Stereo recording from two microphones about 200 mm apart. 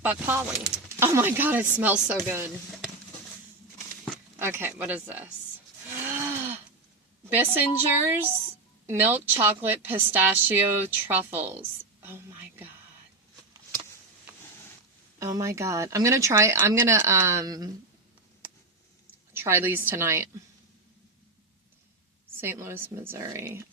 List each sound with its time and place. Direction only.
0.0 s a woman's voice: 10° right (ahead or behind)
4.4 s a woman's voice: 10° right (ahead or behind)
6.0 s cattle: 10° right (ahead or behind)
7.3 s a woman's voice: 10° right (ahead or behind)
12.0 s whispering: 10° right (ahead or behind)
15.2 s a woman's voice: 15° right (ahead or behind)
19.3 s a woman's voice: 10° right (ahead or behind)
22.4 s a woman's voice: 10° right (ahead or behind)